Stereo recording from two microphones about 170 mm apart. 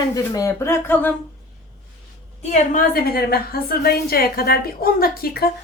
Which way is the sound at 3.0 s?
65° left (ahead or behind).